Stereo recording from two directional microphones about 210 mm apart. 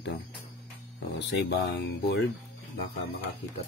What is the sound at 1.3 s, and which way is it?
Speech, 50° left (ahead or behind).